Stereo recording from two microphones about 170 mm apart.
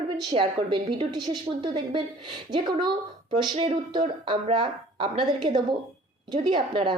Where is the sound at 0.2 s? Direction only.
25° right (ahead or behind).